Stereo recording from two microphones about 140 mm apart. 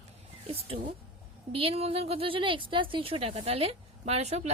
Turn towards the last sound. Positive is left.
turn(degrees=-50)  # may be behind; listen again after turning